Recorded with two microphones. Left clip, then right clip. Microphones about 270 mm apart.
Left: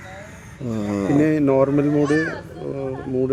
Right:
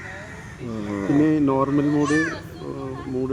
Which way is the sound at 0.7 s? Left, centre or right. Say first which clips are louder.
Left 3 dB; left.